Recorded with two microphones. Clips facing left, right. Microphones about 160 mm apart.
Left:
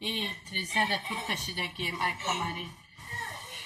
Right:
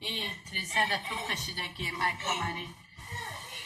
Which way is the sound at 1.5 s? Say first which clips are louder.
Left 2 dB; 20° left (ahead or behind).